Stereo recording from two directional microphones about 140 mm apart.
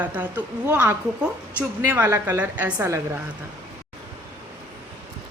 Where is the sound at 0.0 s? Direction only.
10° right (ahead or behind).